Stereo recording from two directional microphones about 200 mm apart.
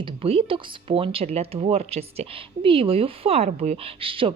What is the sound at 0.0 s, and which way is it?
Speech, 30° right (ahead or behind).